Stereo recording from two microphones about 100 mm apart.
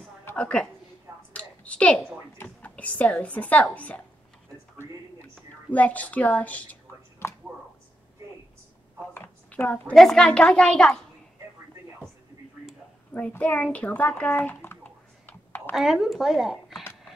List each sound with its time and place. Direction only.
0.4 s a woman's voice: 10° left (ahead or behind)
5.3 s a sound: 15° left (ahead or behind)
9.5 s a woman's voice: 15° left (ahead or behind)
13.1 s speech: 15° left (ahead or behind)
14.8 s computer keyboard: 20° left (ahead or behind)
15.7 s speech: 5° right (ahead or behind)